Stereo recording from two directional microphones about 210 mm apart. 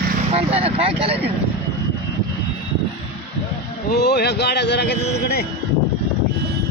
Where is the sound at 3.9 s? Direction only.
50° left (ahead or behind).